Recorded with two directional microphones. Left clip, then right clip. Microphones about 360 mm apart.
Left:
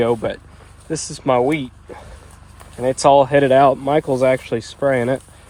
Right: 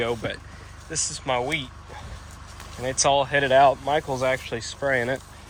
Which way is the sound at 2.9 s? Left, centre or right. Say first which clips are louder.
Left 9 dB; centre.